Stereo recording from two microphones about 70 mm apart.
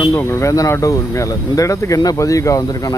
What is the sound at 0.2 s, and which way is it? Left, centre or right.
Speech, left.